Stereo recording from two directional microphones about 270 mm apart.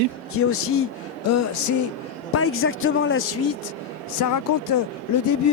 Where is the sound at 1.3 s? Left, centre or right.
Left.